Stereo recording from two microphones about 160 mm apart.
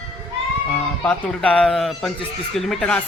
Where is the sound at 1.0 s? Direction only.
10° left (ahead or behind).